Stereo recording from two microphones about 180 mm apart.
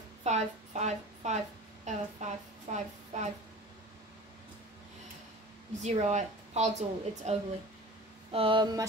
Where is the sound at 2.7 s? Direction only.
40° right (ahead or behind).